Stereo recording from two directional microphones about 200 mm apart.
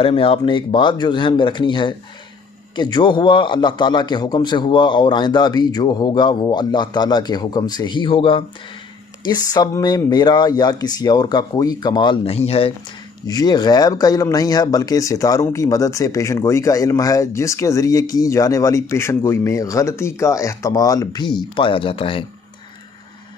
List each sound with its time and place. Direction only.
0.0 s a man's voice: 25° left (ahead or behind)
13.3 s speech: 20° left (ahead or behind)